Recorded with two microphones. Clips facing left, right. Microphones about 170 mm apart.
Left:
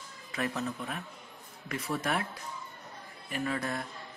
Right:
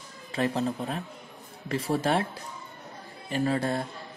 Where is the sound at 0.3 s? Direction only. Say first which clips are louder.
Right 6 dB; 30° right (ahead or behind).